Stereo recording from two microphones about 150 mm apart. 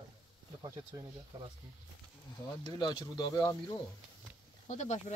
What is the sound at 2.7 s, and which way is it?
Speech, 25° left (ahead or behind).